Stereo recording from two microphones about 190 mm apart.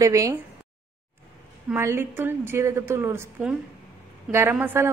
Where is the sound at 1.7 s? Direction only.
10° right (ahead or behind).